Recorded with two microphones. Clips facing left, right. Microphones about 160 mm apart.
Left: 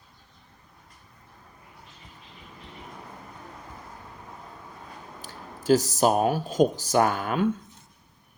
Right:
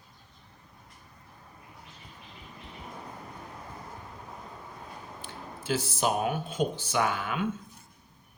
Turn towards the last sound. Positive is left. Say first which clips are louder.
# left 6 dB
turn(degrees=40)  # may be behind; listen again after turning